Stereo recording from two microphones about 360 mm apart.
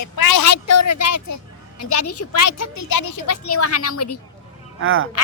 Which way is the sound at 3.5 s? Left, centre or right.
Left.